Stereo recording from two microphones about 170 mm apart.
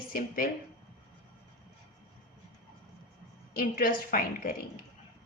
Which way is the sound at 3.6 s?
60° left (ahead or behind).